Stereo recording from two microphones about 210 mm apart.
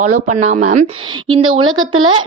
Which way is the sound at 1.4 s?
80° right.